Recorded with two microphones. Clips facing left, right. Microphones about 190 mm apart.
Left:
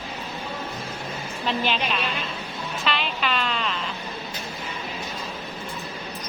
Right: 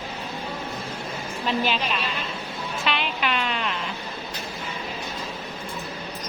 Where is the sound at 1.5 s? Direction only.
5° right (ahead or behind).